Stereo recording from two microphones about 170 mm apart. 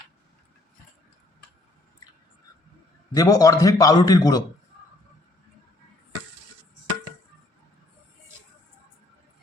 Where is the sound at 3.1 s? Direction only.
20° left (ahead or behind).